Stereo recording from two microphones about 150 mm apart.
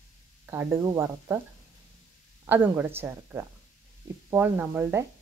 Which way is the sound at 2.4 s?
15° right (ahead or behind).